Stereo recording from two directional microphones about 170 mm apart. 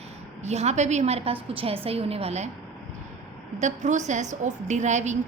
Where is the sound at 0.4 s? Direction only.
40° right (ahead or behind).